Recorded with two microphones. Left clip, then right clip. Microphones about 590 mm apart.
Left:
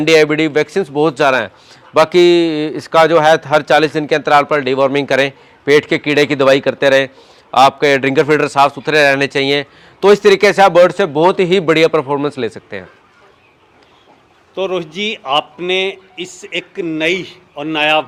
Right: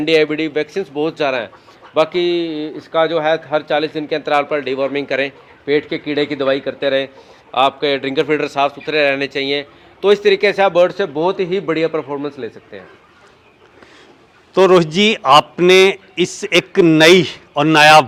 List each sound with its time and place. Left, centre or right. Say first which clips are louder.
0.0 s a man's voice: left 4 dB; left
14.5 s a man's voice: right 8 dB; right